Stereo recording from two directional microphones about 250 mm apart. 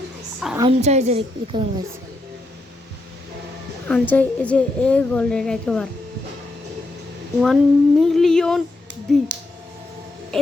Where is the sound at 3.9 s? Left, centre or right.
Centre.